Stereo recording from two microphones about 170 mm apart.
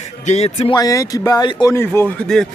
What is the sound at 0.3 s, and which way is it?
Speech, 40° left (ahead or behind).